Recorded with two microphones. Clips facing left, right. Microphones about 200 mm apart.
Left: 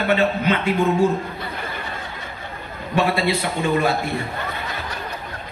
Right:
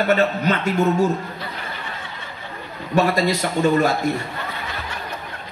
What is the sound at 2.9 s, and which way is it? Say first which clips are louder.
A man's voice: right 2 dB; 40° right (ahead or behind).